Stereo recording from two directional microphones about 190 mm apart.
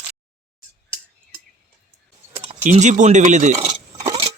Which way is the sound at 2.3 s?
35° right (ahead or behind).